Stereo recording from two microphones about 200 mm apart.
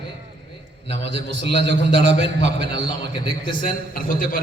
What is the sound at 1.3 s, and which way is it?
A man's voice, 60° right (ahead or behind).